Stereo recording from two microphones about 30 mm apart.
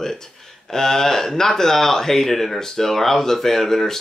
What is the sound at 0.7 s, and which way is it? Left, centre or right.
Speech, centre.